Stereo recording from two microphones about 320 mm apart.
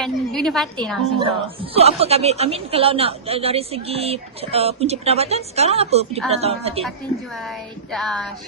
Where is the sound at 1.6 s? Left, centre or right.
Centre.